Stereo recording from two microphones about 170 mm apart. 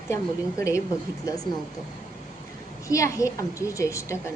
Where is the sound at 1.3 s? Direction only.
20° left (ahead or behind).